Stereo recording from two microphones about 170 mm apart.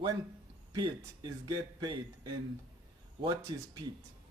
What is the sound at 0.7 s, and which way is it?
Speech, 25° right (ahead or behind).